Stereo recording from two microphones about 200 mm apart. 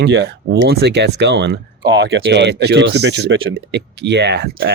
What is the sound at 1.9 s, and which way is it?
Speech, 65° right (ahead or behind).